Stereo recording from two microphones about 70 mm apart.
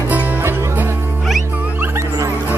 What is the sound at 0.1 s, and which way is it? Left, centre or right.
Music, right.